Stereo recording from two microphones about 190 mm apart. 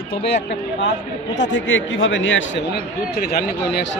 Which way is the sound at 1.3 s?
75° left (ahead or behind).